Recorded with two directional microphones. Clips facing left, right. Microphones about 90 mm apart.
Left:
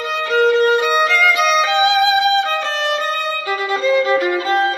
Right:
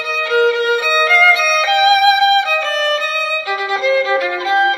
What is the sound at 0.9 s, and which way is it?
Violin, 20° left (ahead or behind).